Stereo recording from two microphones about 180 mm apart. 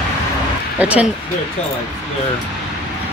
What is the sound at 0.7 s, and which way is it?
Speech, 10° right (ahead or behind).